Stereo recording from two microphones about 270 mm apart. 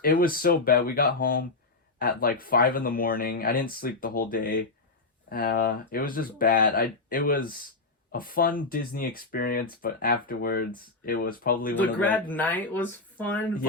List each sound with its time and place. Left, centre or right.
0.0 s speech: left
11.8 s a man's voice: centre